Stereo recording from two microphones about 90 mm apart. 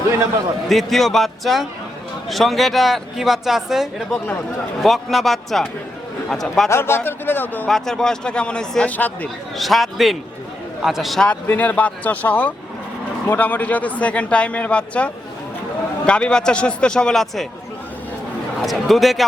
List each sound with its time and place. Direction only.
0.7 s speech: centre (ahead or behind)
6.7 s speech: 30° left (ahead or behind)
7.7 s speech: 5° left (ahead or behind)
9.6 s speech: centre (ahead or behind)
11.3 s speech: 20° left (ahead or behind)
18.6 s speech: centre (ahead or behind)